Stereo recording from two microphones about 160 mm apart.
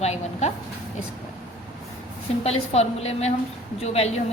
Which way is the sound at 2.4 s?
40° left (ahead or behind).